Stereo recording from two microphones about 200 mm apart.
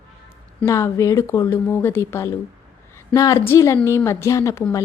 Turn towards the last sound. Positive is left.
turn(degrees=15)  # may be behind; listen again after turning